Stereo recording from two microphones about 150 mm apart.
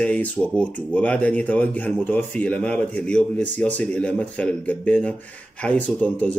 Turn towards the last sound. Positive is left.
turn(degrees=10)  # may be behind; listen again after turning